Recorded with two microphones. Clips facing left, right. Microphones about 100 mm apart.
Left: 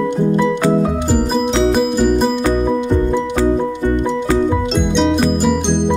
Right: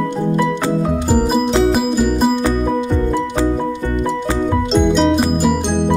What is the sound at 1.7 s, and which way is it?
Music, centre (ahead or behind).